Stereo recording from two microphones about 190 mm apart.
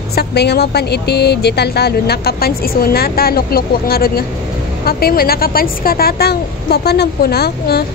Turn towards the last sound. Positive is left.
turn(degrees=55)  # may be behind; listen again after turning